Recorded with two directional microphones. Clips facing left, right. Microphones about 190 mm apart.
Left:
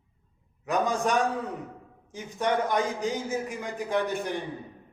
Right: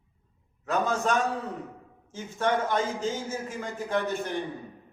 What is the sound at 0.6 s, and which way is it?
A man's voice, 15° left (ahead or behind).